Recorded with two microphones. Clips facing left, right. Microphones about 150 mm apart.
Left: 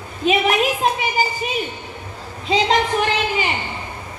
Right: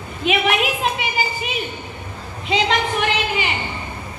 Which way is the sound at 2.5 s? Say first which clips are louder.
Left 2 dB; 35° left (ahead or behind).